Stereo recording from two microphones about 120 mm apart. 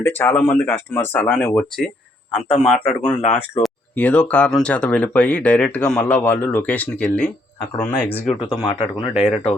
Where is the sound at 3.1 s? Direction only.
80° left.